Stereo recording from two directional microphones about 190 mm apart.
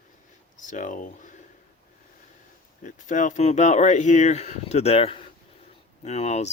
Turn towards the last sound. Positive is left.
turn(degrees=35)  # may be behind; listen again after turning